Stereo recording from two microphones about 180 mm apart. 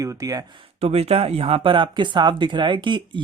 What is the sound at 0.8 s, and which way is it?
Speech, 35° right (ahead or behind).